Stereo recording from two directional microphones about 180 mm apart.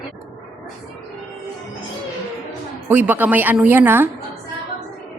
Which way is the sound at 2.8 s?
10° right (ahead or behind).